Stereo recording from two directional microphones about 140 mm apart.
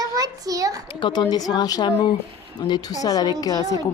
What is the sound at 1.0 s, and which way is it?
A woman's voice, 35° left (ahead or behind).